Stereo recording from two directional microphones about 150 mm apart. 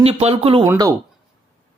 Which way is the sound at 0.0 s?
45° right (ahead or behind).